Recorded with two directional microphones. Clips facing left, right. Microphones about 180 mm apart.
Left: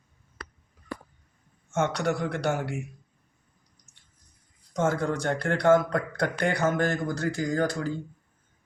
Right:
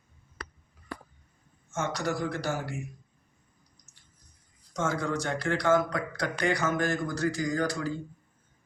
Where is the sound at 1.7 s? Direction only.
65° left (ahead or behind).